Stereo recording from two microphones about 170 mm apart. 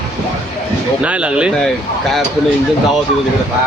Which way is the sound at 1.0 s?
5° right (ahead or behind).